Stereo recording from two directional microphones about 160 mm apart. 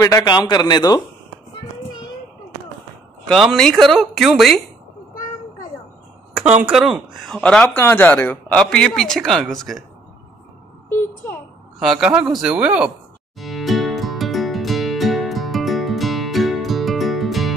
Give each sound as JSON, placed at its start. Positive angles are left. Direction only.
{"t": 0.0, "sound": "a man's voice", "side_deg": 25}
{"t": 3.3, "sound": "speech", "side_deg": 5}
{"t": 6.3, "sound": "speech", "side_deg": -10}
{"t": 10.9, "sound": "a woman's voice", "side_deg": 15}
{"t": 11.8, "sound": "speech", "side_deg": -5}
{"t": 13.4, "sound": "music", "side_deg": 0}